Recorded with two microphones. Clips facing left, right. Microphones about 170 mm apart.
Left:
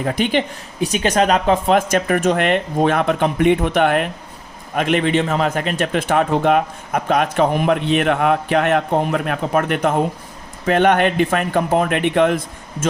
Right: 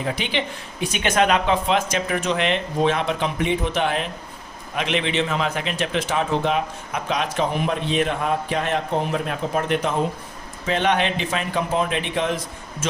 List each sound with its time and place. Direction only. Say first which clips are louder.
0.0 s a man's voice: left 7 dB; 45° left (ahead or behind)